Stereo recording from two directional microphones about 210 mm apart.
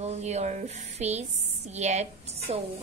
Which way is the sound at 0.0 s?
30° right (ahead or behind).